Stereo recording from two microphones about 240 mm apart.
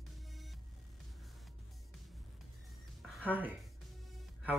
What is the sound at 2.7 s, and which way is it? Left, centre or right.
Music, centre.